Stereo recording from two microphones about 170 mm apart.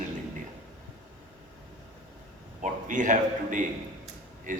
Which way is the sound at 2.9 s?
50° right (ahead or behind).